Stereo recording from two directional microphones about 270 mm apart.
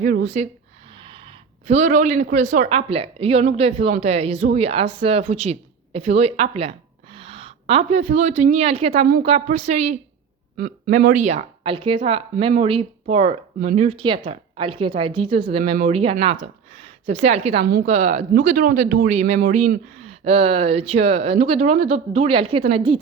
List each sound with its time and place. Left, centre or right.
0.0 s a woman's voice: right
10.6 s a woman's voice: right